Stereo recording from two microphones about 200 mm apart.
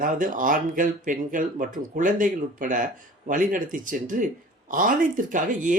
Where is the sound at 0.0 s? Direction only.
40° right (ahead or behind).